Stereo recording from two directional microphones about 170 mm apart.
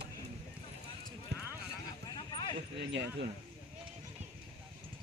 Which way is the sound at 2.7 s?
90° right.